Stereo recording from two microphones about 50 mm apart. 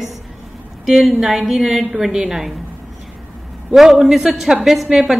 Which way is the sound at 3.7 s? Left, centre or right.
Centre.